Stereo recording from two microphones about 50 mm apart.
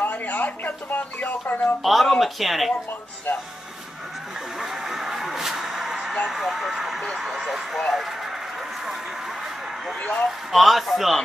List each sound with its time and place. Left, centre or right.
0.0 s speech: left
1.8 s speech: centre
3.3 s speech: left
4.6 s vehicle: centre
6.2 s speech: centre
10.5 s speech: centre